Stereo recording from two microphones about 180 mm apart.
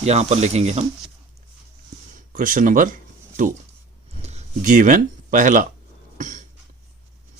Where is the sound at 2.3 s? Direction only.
45° right (ahead or behind).